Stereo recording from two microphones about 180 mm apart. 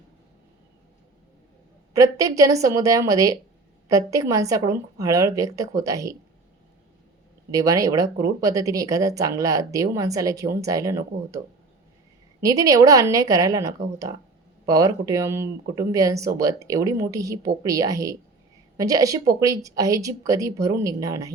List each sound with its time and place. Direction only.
1.9 s speech: 20° right (ahead or behind)
7.5 s speech: 20° right (ahead or behind)
12.4 s speech: 20° right (ahead or behind)